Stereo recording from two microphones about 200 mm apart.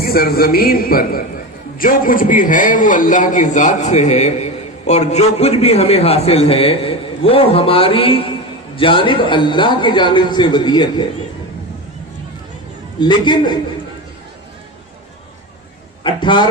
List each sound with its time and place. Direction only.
0.0 s a man's voice: 50° left (ahead or behind); by 11.0 s 20° left (ahead or behind)
13.0 s a man's voice: 20° left (ahead or behind)
16.0 s a man's voice: 25° left (ahead or behind)